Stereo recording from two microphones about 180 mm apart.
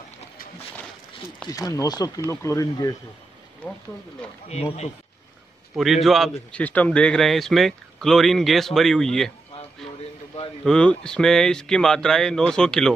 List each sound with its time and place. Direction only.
1.5 s speech: 20° left (ahead or behind)
4.5 s speech: 35° left (ahead or behind)
5.8 s a man's voice: centre (ahead or behind)
10.6 s a man's voice: 5° left (ahead or behind)